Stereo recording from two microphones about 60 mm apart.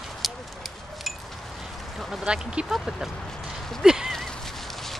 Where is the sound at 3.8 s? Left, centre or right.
Centre.